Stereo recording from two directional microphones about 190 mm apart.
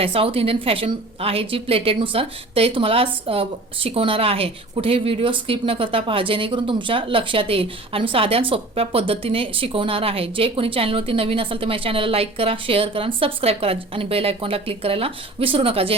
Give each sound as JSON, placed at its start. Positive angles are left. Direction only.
{"t": 0.0, "sound": "a woman's voice", "side_deg": -30}